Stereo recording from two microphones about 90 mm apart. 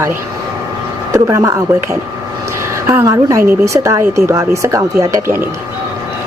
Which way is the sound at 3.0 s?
35° right (ahead or behind).